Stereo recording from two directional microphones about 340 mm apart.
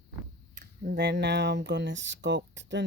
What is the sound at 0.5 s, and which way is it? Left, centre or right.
Speech, right.